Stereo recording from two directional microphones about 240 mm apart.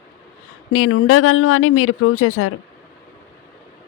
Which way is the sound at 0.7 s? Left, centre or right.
Left.